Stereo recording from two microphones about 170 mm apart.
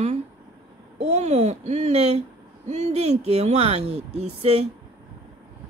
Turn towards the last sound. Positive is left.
turn(degrees=-35)  # may be behind; listen again after turning